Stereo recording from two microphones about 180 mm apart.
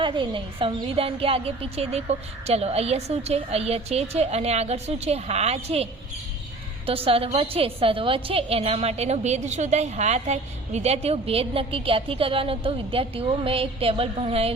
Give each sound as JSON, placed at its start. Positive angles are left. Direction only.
{"t": 0.0, "sound": "a woman's voice", "side_deg": -30}